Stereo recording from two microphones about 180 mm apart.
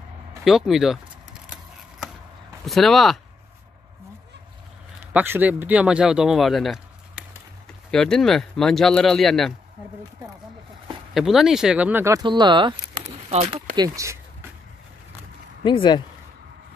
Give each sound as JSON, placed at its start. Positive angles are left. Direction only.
{"t": 0.4, "sound": "speech", "side_deg": 0}
{"t": 2.6, "sound": "speech", "side_deg": 0}
{"t": 5.1, "sound": "speech", "side_deg": -10}
{"t": 11.1, "sound": "speech", "side_deg": 0}
{"t": 13.3, "sound": "speech", "side_deg": -35}
{"t": 13.7, "sound": "speech", "side_deg": -20}
{"t": 15.6, "sound": "speech", "side_deg": 25}